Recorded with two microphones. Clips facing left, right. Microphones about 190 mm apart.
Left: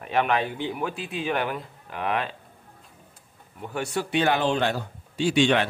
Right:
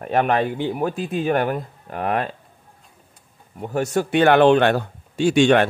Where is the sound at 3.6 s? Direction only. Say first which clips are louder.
Right 7 dB; 40° right (ahead or behind).